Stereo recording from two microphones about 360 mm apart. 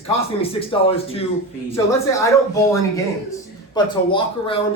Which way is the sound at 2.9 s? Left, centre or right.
Centre.